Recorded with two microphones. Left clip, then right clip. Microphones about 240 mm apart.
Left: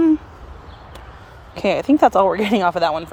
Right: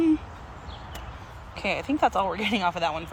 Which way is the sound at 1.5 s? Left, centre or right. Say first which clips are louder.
Left 10 dB; left.